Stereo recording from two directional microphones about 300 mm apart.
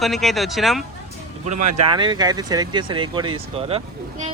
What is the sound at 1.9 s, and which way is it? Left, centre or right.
Speech, centre.